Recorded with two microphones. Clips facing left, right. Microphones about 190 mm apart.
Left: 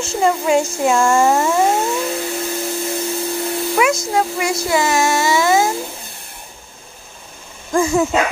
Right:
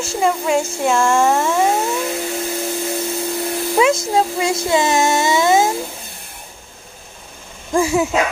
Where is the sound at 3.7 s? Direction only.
25° right (ahead or behind).